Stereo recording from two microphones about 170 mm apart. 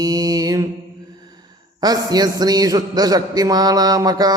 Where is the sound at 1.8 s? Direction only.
25° right (ahead or behind).